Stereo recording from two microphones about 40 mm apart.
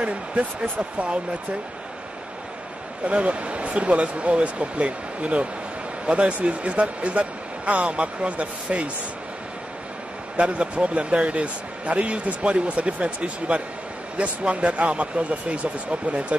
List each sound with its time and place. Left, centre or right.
0.0 s a man's voice: right
3.1 s a man's voice: right
10.3 s a man's voice: right